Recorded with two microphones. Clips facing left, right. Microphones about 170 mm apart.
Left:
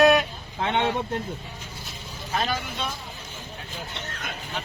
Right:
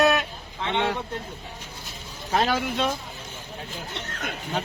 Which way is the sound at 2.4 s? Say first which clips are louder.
Right 5 dB; 90° right.